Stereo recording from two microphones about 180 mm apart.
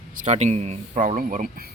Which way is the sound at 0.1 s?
45° right (ahead or behind).